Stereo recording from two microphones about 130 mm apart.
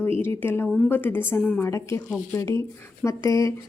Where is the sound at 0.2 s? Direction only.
20° left (ahead or behind).